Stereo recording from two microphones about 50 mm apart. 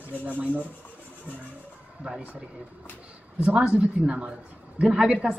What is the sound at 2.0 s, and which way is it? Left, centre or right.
Speech, right.